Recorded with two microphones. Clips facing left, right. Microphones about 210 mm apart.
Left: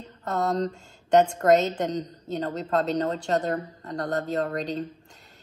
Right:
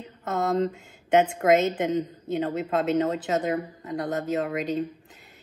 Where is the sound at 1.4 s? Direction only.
Centre (ahead or behind).